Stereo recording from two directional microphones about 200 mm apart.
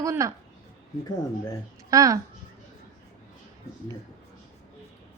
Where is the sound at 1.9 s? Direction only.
15° right (ahead or behind).